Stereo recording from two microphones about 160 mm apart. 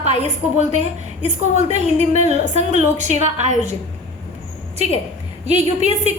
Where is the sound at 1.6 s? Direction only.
45° right (ahead or behind).